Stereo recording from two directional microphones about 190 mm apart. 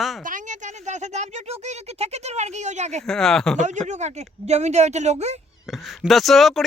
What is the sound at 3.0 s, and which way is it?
Speech, 5° left (ahead or behind).